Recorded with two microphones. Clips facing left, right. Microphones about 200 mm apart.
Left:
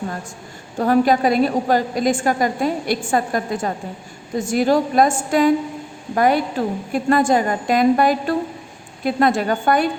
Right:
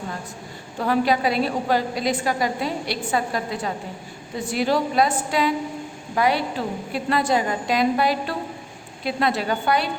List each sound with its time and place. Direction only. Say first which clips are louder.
0.8 s a woman's voice: left 5 dB; 45° left (ahead or behind)